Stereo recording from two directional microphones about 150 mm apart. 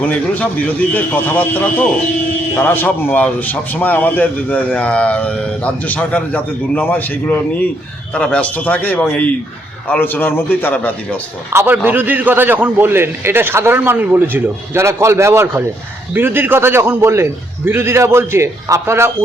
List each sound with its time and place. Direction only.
0.0 s a man's voice: 10° left (ahead or behind)
11.5 s a man's voice: 15° right (ahead or behind)